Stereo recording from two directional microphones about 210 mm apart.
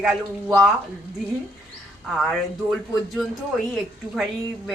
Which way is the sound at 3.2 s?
Centre (ahead or behind).